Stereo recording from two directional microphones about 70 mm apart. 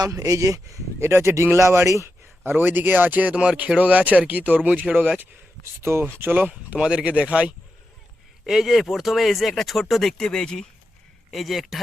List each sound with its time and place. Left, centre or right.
0.1 s speech: right
0.9 s a man's voice: right
5.8 s speech: right
6.3 s speech: right
8.4 s speech: centre